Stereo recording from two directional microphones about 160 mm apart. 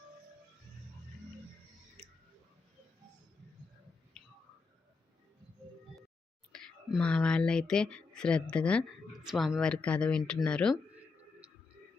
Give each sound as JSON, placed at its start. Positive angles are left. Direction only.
{"t": 6.5, "sound": "speech", "side_deg": 5}